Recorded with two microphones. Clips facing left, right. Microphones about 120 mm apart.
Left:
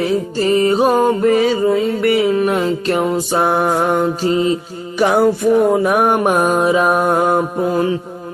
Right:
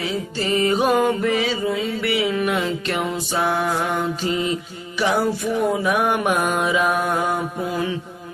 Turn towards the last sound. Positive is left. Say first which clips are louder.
# left 8 dB
turn(degrees=45)  # may be behind; listen again after turning